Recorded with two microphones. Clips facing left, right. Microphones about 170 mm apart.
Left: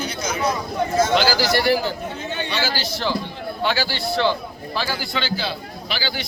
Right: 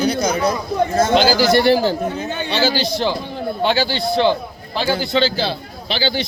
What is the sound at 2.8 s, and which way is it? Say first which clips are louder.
A man's voice: right 4 dB; 20° right (ahead or behind).